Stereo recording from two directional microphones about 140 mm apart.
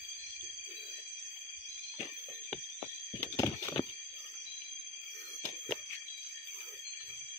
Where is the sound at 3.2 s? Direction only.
25° left (ahead or behind).